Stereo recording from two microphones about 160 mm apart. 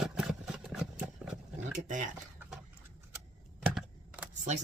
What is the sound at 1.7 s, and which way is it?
Speech, 55° right (ahead or behind).